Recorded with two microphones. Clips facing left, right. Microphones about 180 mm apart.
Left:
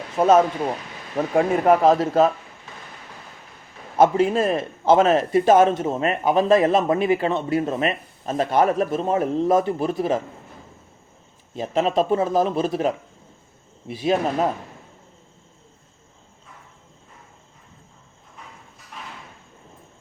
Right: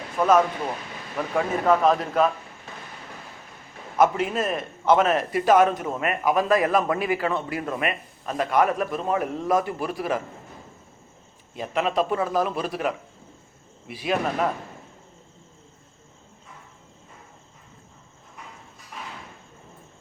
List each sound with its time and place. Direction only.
0.2 s a man's voice: 25° left (ahead or behind)
3.9 s a man's voice: 30° left (ahead or behind)
11.5 s a man's voice: 30° left (ahead or behind)